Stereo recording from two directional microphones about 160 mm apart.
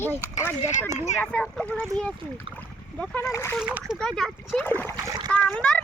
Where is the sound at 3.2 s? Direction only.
15° left (ahead or behind).